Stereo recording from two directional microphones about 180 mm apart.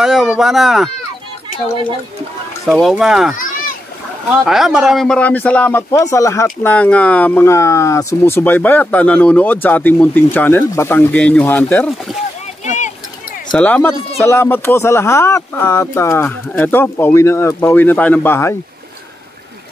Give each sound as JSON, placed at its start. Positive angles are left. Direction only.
{"t": 0.0, "sound": "speech", "side_deg": 0}
{"t": 2.6, "sound": "speech", "side_deg": 0}
{"t": 3.3, "sound": "a sound", "side_deg": 50}
{"t": 4.5, "sound": "speech", "side_deg": 0}
{"t": 12.6, "sound": "a sound", "side_deg": 40}
{"t": 13.5, "sound": "speech", "side_deg": 5}